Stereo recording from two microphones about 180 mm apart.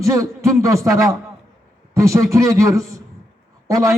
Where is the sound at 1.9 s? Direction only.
15° right (ahead or behind).